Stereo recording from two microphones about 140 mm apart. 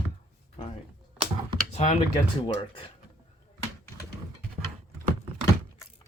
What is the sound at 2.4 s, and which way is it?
Speech, 40° left (ahead or behind).